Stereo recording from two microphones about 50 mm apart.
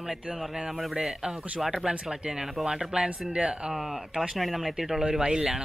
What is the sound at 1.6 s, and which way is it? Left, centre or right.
Speech, centre.